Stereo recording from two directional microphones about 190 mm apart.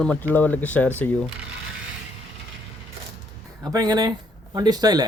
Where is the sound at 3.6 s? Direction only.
20° right (ahead or behind).